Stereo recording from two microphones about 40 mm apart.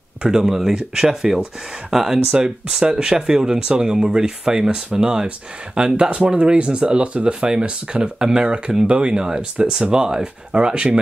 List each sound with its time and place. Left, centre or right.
0.2 s speech: centre
2.1 s speech: right
6.0 s speech: right